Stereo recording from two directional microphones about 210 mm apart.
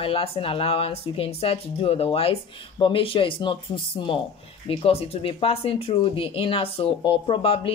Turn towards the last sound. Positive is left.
turn(degrees=25)  # may be behind; listen again after turning